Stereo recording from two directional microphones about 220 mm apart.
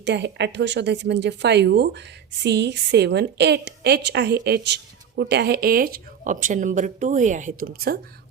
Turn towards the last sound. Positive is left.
turn(degrees=-45)  # may be behind; listen again after turning